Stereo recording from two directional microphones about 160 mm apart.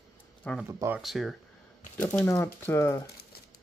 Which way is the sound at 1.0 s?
Centre (ahead or behind).